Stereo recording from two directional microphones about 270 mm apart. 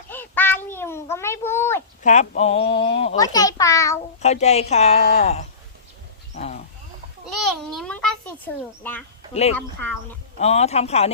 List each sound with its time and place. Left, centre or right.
0.1 s a sound: centre
2.0 s a child's voice: left; by 4.0 s centre
4.2 s a child's voice: left
6.3 s wild animals: left
7.3 s a sound: centre
9.3 s a child's voice: left
9.6 s speech: centre
10.3 s a child's voice: left